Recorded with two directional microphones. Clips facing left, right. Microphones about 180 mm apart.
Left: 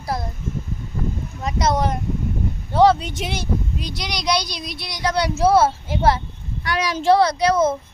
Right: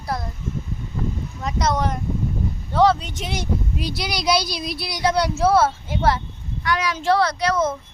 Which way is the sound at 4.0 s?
5° right (ahead or behind).